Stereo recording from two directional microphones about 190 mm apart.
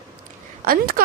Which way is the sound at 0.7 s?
50° right (ahead or behind).